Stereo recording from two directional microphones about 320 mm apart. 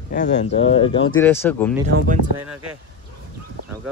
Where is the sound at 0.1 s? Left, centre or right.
Left.